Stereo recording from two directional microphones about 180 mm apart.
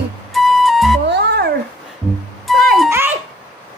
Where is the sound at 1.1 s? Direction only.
65° right (ahead or behind).